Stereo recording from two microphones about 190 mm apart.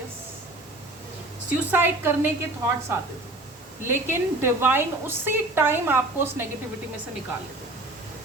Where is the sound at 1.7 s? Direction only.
10° right (ahead or behind).